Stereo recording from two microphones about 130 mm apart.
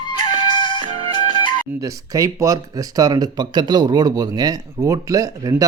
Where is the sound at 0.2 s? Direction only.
40° left (ahead or behind).